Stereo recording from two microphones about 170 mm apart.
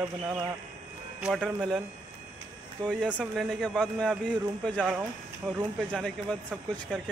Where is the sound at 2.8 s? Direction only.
Centre (ahead or behind).